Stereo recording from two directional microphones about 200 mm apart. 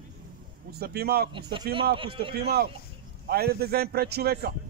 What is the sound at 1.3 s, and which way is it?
Speech, 25° right (ahead or behind).